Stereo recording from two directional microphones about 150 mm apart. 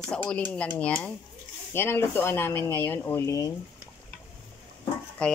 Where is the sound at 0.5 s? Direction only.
10° left (ahead or behind).